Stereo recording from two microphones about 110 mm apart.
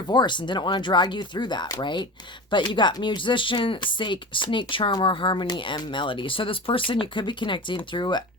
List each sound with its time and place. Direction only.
0.1 s speech: 45° left (ahead or behind)